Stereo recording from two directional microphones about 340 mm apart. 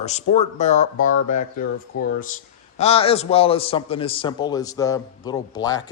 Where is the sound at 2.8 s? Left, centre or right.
Centre.